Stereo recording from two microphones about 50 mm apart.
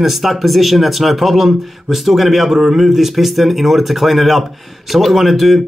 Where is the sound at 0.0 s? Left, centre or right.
Centre.